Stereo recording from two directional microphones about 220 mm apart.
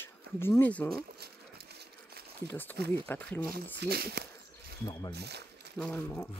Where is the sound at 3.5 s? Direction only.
45° right (ahead or behind).